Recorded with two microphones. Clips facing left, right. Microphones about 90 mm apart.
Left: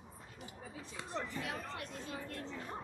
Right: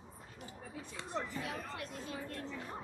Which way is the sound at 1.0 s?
Centre (ahead or behind).